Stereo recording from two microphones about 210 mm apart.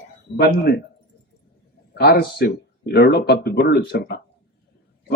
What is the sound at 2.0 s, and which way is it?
Speech, 50° left (ahead or behind).